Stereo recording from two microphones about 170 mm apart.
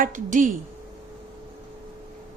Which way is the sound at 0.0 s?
50° right (ahead or behind).